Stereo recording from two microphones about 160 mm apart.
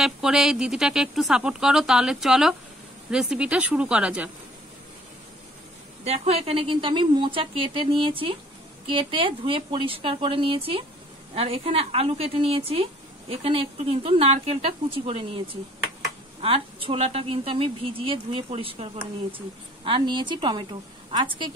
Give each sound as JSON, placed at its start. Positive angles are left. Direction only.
{"t": 0.0, "sound": "speech", "side_deg": 0}
{"t": 6.0, "sound": "a woman's voice", "side_deg": -40}